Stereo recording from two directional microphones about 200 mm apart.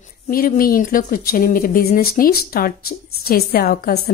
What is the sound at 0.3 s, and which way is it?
Speech, 45° left (ahead or behind).